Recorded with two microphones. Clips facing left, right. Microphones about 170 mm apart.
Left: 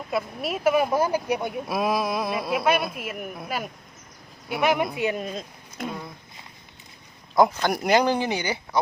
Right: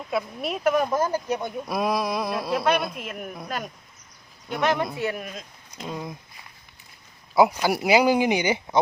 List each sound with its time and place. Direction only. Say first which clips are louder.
0.1 s speech: even; centre (ahead or behind)
4.9 s speech: left 3 dB; 20° left (ahead or behind)
7.3 s speech: right 1 dB; 5° right (ahead or behind)